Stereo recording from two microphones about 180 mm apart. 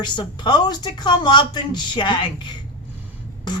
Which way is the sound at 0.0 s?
25° left (ahead or behind).